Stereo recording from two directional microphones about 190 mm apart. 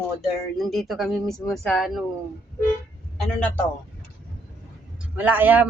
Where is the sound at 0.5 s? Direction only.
Centre (ahead or behind).